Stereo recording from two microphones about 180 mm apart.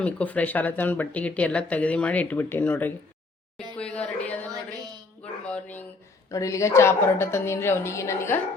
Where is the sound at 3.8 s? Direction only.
5° left (ahead or behind).